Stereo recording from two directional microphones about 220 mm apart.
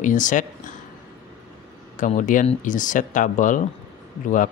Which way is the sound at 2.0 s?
35° left (ahead or behind).